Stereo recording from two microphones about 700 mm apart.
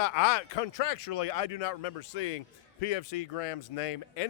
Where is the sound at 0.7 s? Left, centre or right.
Left.